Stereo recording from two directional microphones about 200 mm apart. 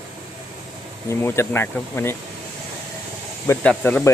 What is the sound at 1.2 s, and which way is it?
Speech, 10° left (ahead or behind).